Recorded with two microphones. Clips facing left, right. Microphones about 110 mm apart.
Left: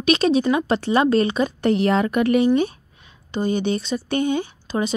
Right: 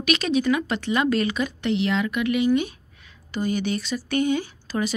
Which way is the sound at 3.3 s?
30° left (ahead or behind).